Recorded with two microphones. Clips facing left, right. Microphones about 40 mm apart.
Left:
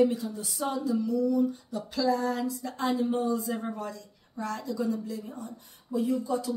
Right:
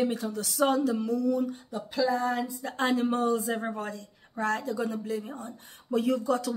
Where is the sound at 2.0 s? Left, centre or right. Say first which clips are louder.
Left 1 dB; right.